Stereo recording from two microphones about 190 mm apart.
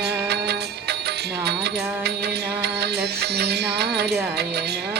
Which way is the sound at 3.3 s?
60° right (ahead or behind).